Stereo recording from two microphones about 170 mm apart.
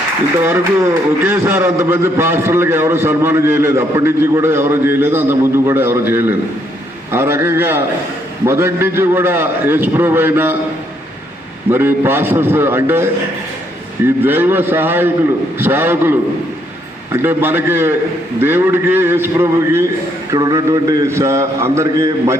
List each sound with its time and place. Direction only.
0.4 s a man's voice: 15° right (ahead or behind)
11.7 s a man's voice: 10° right (ahead or behind)